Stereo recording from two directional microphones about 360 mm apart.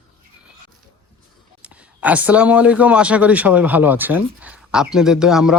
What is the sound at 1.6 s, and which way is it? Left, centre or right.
Speech, centre.